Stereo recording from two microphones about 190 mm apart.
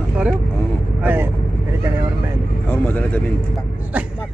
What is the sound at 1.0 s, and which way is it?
Speech, 10° right (ahead or behind).